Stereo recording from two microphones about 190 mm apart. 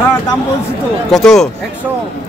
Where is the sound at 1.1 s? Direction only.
Centre (ahead or behind).